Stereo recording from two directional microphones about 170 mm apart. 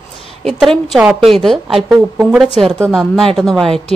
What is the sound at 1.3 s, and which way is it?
A woman's voice, centre (ahead or behind).